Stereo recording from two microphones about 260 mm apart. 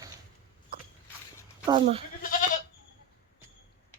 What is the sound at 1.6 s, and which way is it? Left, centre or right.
Speech, right.